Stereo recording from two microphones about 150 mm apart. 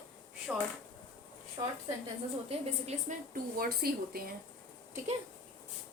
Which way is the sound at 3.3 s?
85° right.